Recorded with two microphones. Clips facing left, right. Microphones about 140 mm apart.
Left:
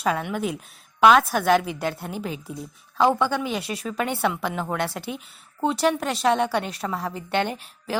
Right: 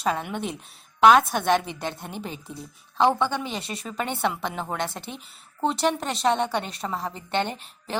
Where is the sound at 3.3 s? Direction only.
5° left (ahead or behind).